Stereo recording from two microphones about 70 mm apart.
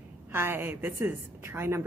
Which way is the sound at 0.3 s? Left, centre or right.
Right.